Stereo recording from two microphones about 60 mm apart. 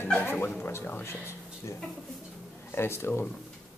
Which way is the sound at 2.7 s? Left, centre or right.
Left.